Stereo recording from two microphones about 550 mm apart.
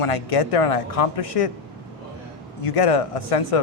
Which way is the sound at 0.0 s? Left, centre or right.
Left.